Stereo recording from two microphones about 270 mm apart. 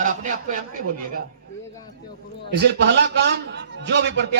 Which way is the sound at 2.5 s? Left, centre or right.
Right.